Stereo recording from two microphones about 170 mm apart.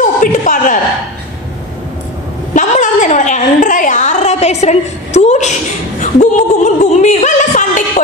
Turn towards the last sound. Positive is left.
turn(degrees=45)  # may be behind; listen again after turning